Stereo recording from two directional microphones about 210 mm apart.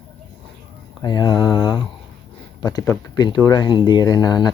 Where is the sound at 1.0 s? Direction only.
20° left (ahead or behind).